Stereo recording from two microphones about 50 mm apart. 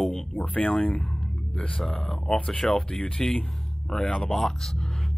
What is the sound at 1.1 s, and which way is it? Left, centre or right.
Music, centre.